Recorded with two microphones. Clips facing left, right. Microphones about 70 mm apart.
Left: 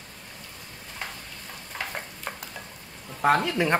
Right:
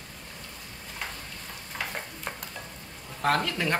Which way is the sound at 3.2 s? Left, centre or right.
Centre.